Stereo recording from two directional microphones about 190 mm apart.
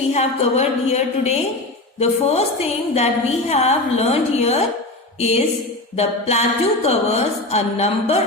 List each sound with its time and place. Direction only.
0.1 s a woman's voice: 35° left (ahead or behind)